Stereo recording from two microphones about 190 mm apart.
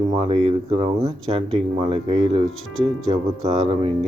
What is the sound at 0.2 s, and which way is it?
Speech, 30° right (ahead or behind).